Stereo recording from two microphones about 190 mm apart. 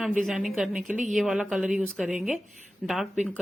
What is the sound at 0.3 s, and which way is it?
Speech, centre (ahead or behind).